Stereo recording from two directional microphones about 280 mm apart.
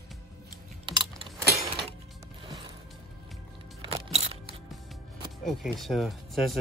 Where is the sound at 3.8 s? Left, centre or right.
Right.